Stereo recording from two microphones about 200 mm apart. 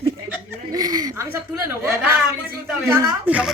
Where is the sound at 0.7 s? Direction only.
20° right (ahead or behind).